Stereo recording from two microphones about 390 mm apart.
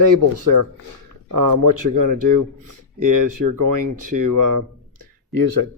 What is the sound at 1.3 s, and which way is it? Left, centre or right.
Speech, right.